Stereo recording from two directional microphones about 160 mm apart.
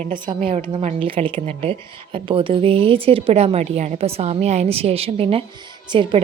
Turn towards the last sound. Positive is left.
turn(degrees=-30)  # may be behind; listen again after turning